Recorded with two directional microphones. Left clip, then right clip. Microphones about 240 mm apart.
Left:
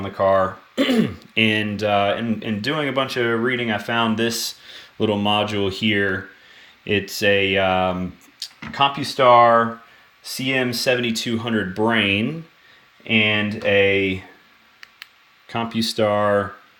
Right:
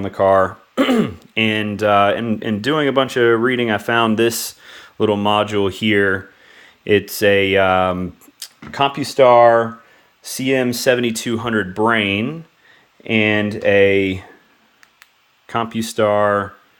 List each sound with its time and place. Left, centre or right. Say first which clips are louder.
0.0 s speech: right 4 dB; right; by 12.4 s centre
13.1 s speech: right 2 dB; right
15.4 s speech: right 2 dB; centre